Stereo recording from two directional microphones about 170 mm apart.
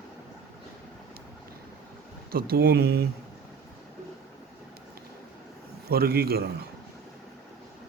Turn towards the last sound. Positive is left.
turn(degrees=-65)  # may be behind; listen again after turning